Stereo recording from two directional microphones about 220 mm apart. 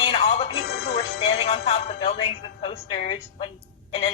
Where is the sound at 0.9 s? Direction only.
25° left (ahead or behind).